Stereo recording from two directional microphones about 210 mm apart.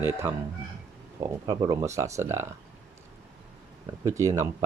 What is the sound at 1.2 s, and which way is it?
Speech, 20° right (ahead or behind).